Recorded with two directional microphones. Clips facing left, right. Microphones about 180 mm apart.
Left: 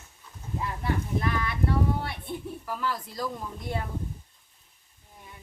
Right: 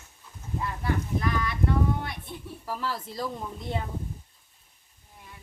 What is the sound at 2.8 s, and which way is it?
Speech, 25° right (ahead or behind).